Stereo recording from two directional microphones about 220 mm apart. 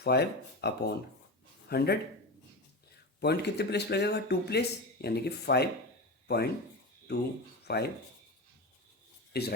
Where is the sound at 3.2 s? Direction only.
50° left (ahead or behind).